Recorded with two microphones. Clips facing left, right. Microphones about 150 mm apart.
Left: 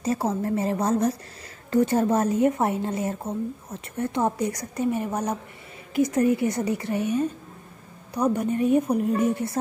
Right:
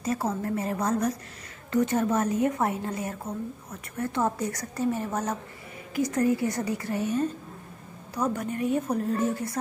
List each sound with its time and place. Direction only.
0.0 s a woman's voice: 25° left (ahead or behind)